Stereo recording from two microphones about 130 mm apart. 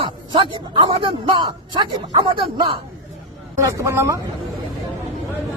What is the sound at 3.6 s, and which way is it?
Speech, 20° right (ahead or behind).